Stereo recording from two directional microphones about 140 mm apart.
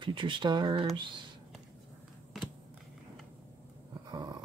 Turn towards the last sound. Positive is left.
turn(degrees=-30)  # may be behind; listen again after turning